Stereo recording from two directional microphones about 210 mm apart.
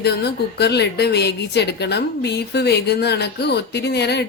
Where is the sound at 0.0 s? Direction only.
50° left (ahead or behind).